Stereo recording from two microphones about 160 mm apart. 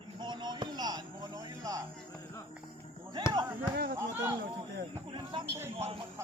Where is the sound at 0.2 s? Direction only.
30° right (ahead or behind).